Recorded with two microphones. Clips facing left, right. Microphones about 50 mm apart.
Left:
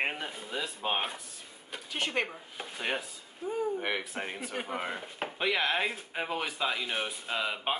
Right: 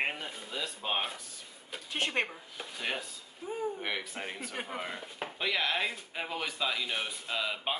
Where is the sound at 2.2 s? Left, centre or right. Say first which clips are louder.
Left 2 dB; centre.